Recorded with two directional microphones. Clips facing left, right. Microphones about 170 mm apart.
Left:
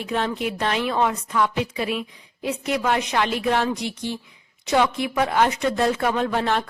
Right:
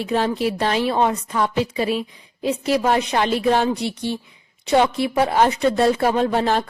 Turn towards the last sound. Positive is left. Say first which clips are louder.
# right 4 dB
turn(degrees=-35)  # may be behind; listen again after turning